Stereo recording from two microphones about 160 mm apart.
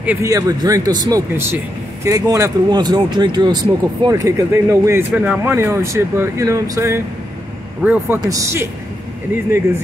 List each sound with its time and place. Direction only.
0.0 s speech: 15° right (ahead or behind)